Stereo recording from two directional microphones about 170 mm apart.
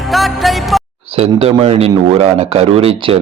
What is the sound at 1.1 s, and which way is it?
Speech, 35° right (ahead or behind).